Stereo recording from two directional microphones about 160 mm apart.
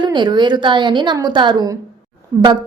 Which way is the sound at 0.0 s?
30° right (ahead or behind).